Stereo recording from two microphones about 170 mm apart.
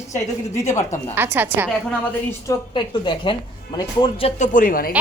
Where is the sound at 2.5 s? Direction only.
25° left (ahead or behind); by 4.9 s 55° left (ahead or behind).